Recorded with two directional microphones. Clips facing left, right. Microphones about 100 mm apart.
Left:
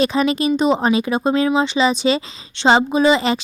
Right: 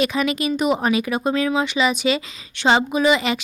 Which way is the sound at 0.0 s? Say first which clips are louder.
Left 4 dB; 30° left (ahead or behind).